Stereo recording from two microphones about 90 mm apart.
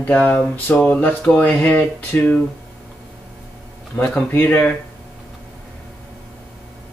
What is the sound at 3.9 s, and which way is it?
Speech, 20° left (ahead or behind).